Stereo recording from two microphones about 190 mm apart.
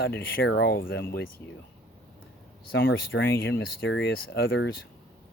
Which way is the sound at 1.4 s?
10° left (ahead or behind).